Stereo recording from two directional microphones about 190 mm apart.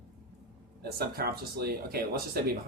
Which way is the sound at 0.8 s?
55° right (ahead or behind).